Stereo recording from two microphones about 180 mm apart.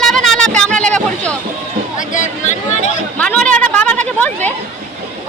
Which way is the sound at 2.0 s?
45° left (ahead or behind).